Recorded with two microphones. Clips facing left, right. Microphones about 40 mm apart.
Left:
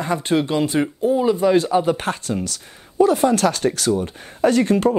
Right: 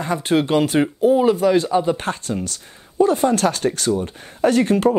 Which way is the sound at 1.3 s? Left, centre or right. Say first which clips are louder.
Even; centre.